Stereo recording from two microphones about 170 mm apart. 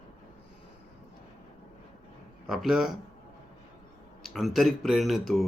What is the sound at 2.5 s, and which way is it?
Speech, centre (ahead or behind).